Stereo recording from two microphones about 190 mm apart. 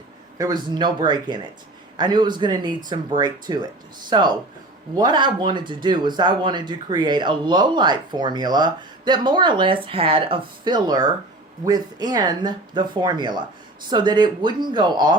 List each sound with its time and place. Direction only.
0.3 s speech: 20° right (ahead or behind)